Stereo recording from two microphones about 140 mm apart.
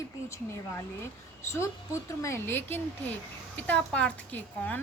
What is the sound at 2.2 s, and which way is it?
Speech, 20° left (ahead or behind).